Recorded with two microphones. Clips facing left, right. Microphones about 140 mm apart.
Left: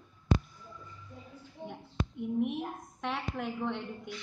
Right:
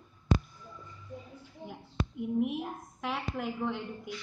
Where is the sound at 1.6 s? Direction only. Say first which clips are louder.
Even; 5° right (ahead or behind).